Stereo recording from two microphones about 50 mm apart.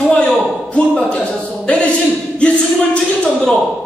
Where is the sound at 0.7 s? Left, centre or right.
Left.